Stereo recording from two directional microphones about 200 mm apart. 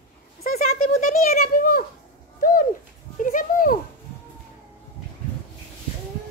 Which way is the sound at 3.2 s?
40° left (ahead or behind).